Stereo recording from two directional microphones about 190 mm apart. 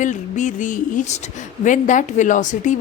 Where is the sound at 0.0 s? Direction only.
40° left (ahead or behind).